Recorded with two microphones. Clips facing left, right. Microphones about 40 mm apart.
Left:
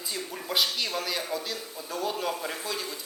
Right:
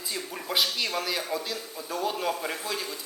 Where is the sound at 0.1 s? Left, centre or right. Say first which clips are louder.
Right 1 dB; centre.